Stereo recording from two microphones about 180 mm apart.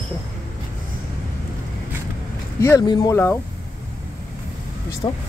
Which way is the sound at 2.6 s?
20° left (ahead or behind).